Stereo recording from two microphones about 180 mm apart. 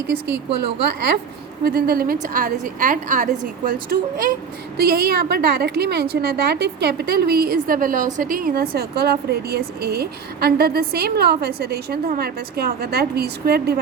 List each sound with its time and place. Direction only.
1.6 s a woman's voice: 55° right (ahead or behind)